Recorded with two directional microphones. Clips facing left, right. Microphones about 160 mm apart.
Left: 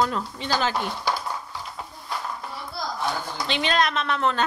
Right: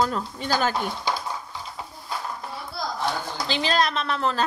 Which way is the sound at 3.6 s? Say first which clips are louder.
Even; 35° right (ahead or behind).